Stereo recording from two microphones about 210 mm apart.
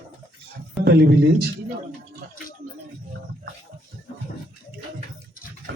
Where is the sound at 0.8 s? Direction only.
50° right (ahead or behind).